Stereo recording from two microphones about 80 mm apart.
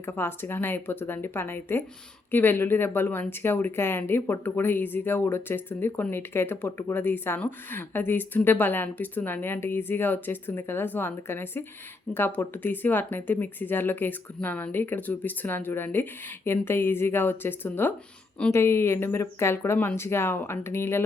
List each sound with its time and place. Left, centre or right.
0.0 s speech: left